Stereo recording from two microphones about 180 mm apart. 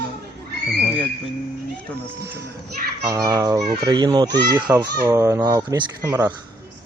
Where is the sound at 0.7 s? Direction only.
5° left (ahead or behind).